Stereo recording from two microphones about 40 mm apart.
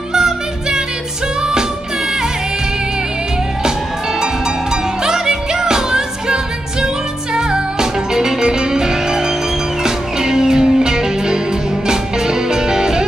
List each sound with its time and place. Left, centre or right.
0.1 s music: centre
5.0 s music: centre